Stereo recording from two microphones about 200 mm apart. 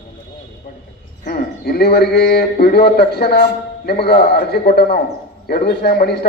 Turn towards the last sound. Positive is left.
turn(degrees=55)  # may be behind; listen again after turning